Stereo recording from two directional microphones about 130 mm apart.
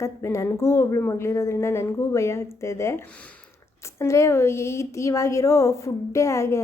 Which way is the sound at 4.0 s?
20° left (ahead or behind).